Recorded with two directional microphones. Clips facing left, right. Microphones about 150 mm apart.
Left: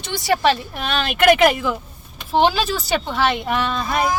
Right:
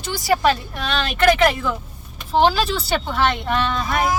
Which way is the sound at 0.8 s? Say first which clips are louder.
Left 2 dB; 5° left (ahead or behind).